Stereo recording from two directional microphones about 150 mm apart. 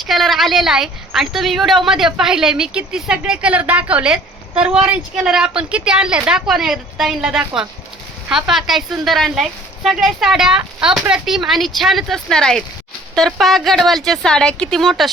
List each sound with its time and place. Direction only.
0.0 s a woman's voice: centre (ahead or behind)